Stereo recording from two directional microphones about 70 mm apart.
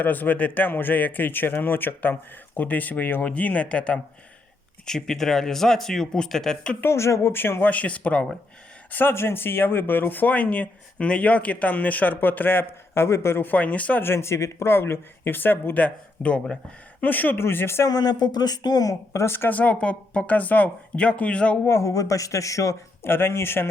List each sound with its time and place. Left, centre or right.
0.0 s speech: left; by 6.7 s centre
6.8 s speech: left; by 8.3 s centre
8.9 s speech: left
14.0 s speech: left
17.8 s speech: left
19.2 s speech: left
19.5 s speech: centre
21.7 s speech: left
23.0 s speech: left